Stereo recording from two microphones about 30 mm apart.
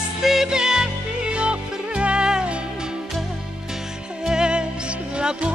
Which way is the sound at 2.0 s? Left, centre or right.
Right.